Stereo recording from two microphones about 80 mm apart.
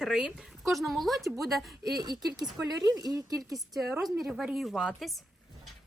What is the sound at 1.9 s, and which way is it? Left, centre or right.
A woman's voice, right.